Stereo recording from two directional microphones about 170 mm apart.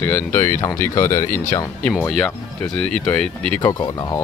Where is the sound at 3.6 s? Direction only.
25° left (ahead or behind).